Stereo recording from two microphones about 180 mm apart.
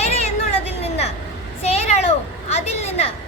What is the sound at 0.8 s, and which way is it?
Vehicle, 35° left (ahead or behind).